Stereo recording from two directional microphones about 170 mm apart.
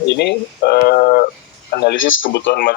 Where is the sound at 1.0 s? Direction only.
55° left (ahead or behind).